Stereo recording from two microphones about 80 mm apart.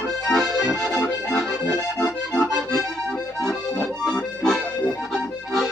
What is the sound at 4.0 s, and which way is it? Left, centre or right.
Accordion, centre.